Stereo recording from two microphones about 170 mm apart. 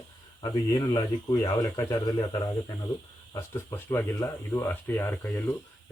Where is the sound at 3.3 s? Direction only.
15° left (ahead or behind).